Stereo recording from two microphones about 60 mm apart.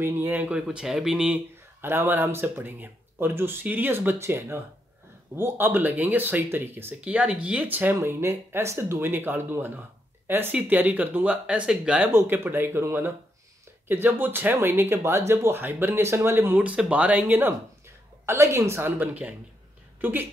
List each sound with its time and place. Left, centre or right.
0.0 s speech: right
0.5 s speech: centre
1.8 s speech: right
7.0 s speech: centre
7.7 s speech: right
8.0 s speech: right; by 12.1 s centre
12.1 s speech: right
15.9 s speech: right
16.5 s speech: right
18.2 s speech: right
18.8 s speech: right